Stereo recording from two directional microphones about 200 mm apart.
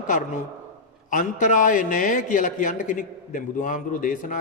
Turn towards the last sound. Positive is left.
turn(degrees=40)  # may be behind; listen again after turning